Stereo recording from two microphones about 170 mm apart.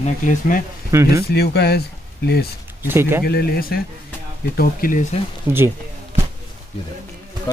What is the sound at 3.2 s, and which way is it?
Speech, 65° left (ahead or behind).